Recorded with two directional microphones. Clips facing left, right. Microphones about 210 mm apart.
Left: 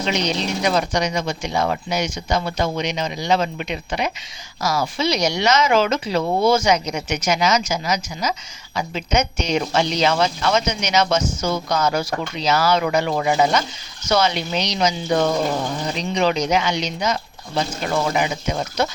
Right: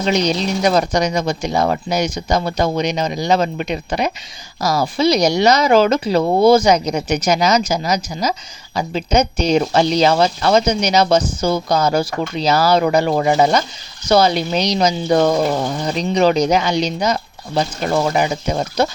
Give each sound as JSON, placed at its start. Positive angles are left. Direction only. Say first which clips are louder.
{"t": 0.0, "sound": "speech", "louder": "right 5 dB", "side_deg": -40}